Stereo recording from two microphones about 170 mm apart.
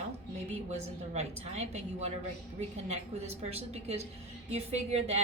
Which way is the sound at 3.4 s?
40° right (ahead or behind).